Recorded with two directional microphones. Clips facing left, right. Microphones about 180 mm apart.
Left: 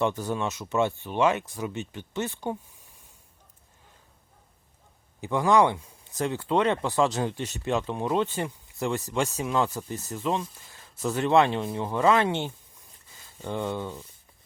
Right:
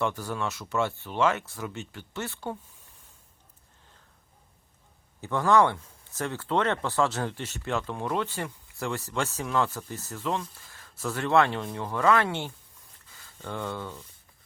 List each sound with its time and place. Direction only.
0.0 s speech: 20° left (ahead or behind)
5.2 s speech: 15° left (ahead or behind)
13.1 s a sound: 20° left (ahead or behind)